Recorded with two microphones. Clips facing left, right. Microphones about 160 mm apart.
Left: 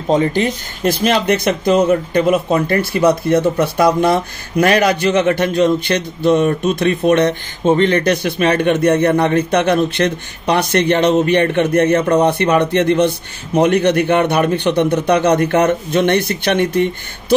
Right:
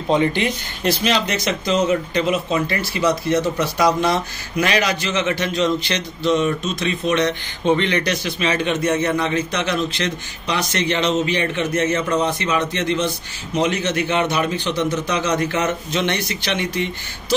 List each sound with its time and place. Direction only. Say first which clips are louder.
0.1 s speech: left 4 dB; 40° left (ahead or behind)